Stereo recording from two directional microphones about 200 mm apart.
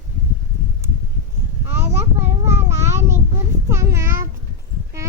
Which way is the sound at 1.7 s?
10° right (ahead or behind).